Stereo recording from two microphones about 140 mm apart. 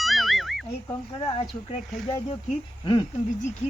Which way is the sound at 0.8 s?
30° left (ahead or behind).